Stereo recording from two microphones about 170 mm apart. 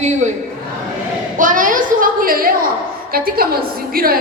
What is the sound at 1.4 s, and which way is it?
A woman's voice, 50° right (ahead or behind).